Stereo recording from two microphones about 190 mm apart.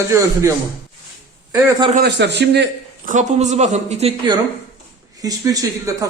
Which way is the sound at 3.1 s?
40° right (ahead or behind).